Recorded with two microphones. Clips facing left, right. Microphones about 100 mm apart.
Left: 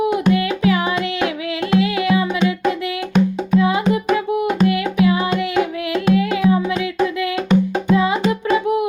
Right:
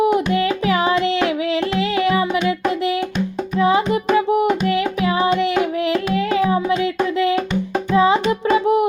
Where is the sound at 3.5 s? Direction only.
25° right (ahead or behind).